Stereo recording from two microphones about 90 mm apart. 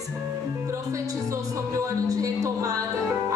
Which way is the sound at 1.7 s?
40° right (ahead or behind).